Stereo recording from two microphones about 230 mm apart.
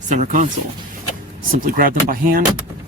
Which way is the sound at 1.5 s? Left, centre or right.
Right.